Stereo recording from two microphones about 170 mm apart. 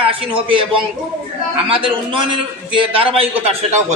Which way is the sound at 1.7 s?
30° right (ahead or behind).